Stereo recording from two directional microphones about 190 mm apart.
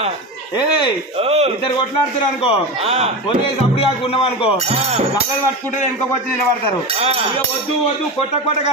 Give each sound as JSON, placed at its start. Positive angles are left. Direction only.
{"t": 0.6, "sound": "speech", "side_deg": 25}
{"t": 1.2, "sound": "a man's voice", "side_deg": -35}
{"t": 2.8, "sound": "music", "side_deg": -30}
{"t": 3.7, "sound": "speech", "side_deg": 30}
{"t": 4.6, "sound": "music", "side_deg": -30}
{"t": 7.0, "sound": "music", "side_deg": -30}